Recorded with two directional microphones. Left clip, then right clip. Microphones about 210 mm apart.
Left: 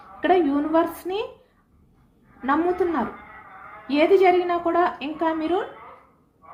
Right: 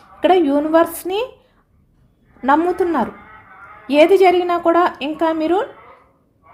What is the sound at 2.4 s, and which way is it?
A woman's voice, 55° right (ahead or behind).